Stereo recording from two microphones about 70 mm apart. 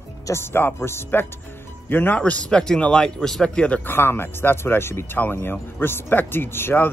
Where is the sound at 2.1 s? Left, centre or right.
Centre.